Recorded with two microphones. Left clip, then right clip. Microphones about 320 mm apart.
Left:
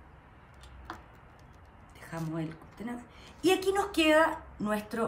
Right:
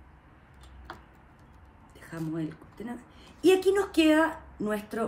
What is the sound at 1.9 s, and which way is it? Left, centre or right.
A woman's voice, centre.